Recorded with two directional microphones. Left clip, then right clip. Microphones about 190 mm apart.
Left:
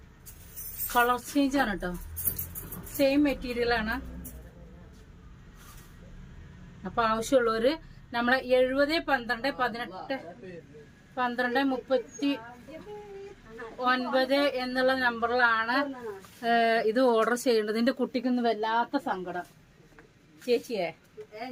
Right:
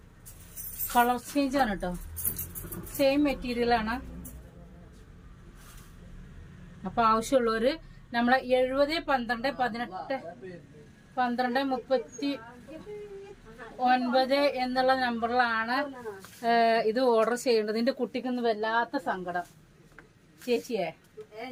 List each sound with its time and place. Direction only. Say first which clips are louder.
0.9 s a woman's voice: even; 20° left (ahead or behind)
3.0 s a woman's voice: even; 20° left (ahead or behind)
6.9 s a woman's voice: right 1 dB; 20° left (ahead or behind)
13.8 s a woman's voice: right 2 dB; 20° left (ahead or behind)
20.4 s a woman's voice: left 1 dB; 15° left (ahead or behind)